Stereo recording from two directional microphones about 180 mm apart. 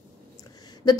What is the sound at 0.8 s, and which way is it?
Speech, 25° left (ahead or behind).